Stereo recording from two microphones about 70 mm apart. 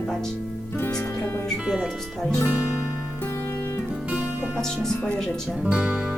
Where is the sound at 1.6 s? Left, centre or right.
Centre.